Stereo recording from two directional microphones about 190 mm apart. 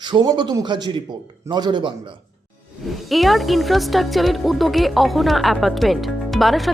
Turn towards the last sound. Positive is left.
turn(degrees=0)  # may be behind; listen again after turning